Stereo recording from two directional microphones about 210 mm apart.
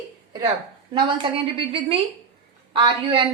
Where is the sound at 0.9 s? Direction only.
25° right (ahead or behind).